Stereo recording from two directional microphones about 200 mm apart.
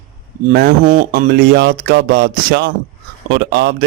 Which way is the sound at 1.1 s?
55° right (ahead or behind).